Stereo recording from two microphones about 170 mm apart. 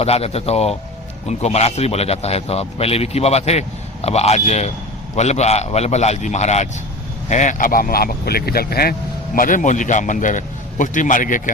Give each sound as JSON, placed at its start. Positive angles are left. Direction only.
{"t": 0.0, "sound": "a man's voice", "side_deg": 35}